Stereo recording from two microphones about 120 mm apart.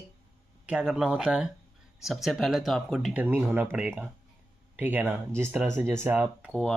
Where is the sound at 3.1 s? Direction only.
15° right (ahead or behind).